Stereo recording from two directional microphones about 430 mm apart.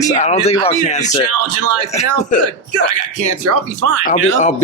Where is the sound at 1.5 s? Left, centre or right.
Right.